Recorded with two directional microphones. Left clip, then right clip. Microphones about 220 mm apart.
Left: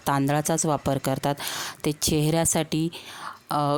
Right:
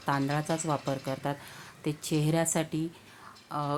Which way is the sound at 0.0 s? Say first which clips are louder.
Left 6 dB; 50° left (ahead or behind).